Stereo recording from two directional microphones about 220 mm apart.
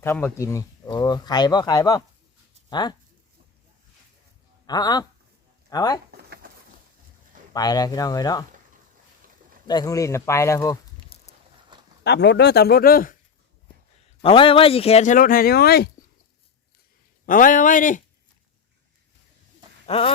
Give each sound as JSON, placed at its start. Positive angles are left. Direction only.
{"t": 0.0, "sound": "speech", "side_deg": 10}
{"t": 4.6, "sound": "speech", "side_deg": 15}
{"t": 6.1, "sound": "a sound", "side_deg": -45}
{"t": 7.5, "sound": "speech", "side_deg": 15}
{"t": 9.6, "sound": "speech", "side_deg": 15}
{"t": 11.1, "sound": "a sound", "side_deg": 25}
{"t": 12.0, "sound": "speech", "side_deg": 50}
{"t": 14.2, "sound": "speech", "side_deg": 25}
{"t": 17.2, "sound": "speech", "side_deg": 40}